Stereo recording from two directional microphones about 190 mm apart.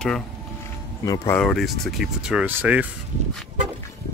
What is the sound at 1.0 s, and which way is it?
Speech, 15° left (ahead or behind).